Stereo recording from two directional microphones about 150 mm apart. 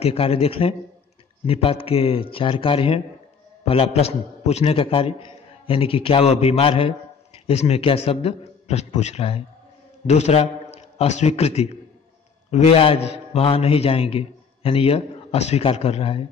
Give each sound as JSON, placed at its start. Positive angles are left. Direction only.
{"t": 0.0, "sound": "a man's voice", "side_deg": 40}